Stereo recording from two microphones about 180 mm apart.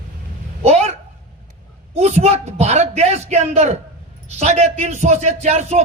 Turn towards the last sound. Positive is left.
turn(degrees=-40)  # may be behind; listen again after turning